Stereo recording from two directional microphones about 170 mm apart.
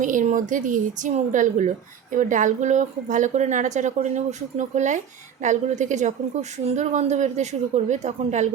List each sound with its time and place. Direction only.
0.0 s a woman's voice: 50° right (ahead or behind)